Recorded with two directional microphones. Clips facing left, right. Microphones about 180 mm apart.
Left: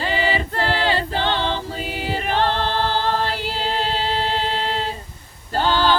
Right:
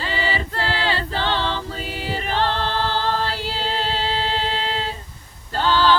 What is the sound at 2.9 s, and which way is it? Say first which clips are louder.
A capella: left 1 dB; 15° left (ahead or behind).